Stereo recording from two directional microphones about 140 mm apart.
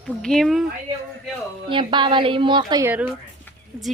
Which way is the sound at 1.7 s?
35° right (ahead or behind).